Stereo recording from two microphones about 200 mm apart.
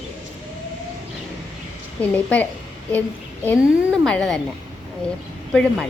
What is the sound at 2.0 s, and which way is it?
Speech, 5° left (ahead or behind).